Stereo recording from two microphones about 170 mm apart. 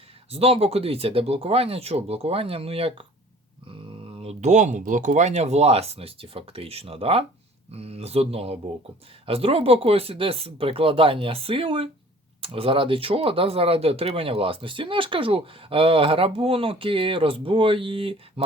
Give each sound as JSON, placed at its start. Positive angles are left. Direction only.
{"t": 0.3, "sound": "speech", "side_deg": -35}
{"t": 4.2, "sound": "speech", "side_deg": -40}